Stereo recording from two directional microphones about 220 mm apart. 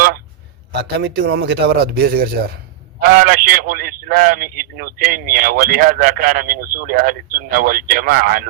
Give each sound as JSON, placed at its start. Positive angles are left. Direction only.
{"t": 0.7, "sound": "a man's voice", "side_deg": -50}